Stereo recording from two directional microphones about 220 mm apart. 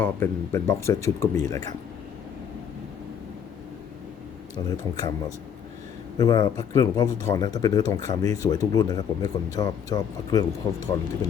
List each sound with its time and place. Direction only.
0.0 s speech: 10° left (ahead or behind)
4.5 s speech: 15° left (ahead or behind)
6.1 s speech: 20° left (ahead or behind)